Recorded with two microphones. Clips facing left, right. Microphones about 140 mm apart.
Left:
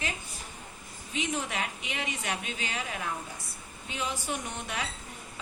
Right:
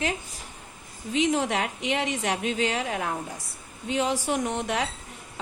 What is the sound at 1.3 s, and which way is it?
Speech, 80° right.